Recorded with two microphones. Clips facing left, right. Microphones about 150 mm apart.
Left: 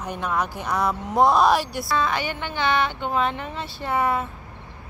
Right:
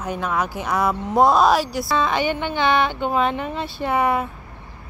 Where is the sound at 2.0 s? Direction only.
20° right (ahead or behind).